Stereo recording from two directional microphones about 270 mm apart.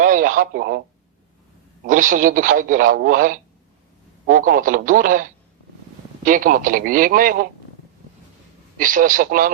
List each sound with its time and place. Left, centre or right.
0.0 s speech: right
1.8 s speech: right
8.8 s speech: right